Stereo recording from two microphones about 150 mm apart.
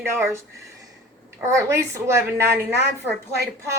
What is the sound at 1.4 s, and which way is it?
A woman's voice, 20° right (ahead or behind).